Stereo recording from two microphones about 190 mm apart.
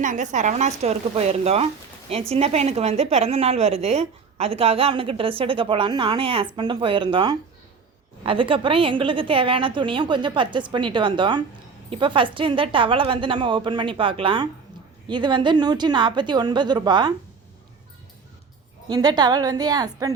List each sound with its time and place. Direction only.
0.0 s a woman's voice: 40° right (ahead or behind); by 17.1 s 25° right (ahead or behind)
18.9 s a woman's voice: 20° right (ahead or behind)